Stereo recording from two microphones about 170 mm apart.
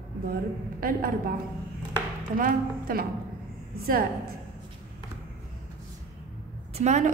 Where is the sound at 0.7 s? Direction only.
55° right (ahead or behind).